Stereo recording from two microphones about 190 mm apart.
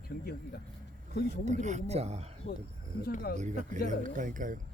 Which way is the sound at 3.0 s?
50° left (ahead or behind).